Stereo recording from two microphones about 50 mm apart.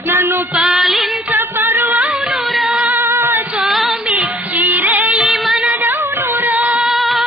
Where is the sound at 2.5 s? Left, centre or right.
Centre.